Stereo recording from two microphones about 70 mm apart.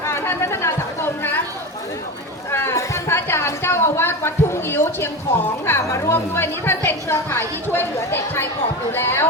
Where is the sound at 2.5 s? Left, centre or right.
Left.